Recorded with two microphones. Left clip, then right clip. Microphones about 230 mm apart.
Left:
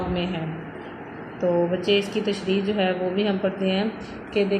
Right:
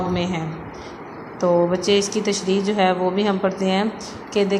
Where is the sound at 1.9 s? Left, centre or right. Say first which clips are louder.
Right 3 dB; right.